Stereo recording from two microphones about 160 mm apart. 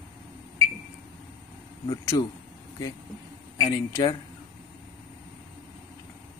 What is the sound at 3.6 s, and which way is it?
Speech, 30° left (ahead or behind).